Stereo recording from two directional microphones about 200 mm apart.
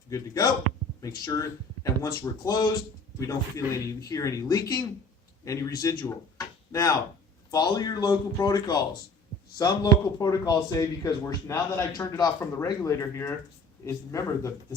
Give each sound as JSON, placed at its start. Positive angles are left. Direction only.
{"t": 0.1, "sound": "speech", "side_deg": 20}